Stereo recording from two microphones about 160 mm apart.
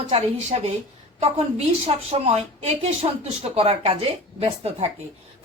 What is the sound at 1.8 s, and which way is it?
A woman's voice, 40° right (ahead or behind).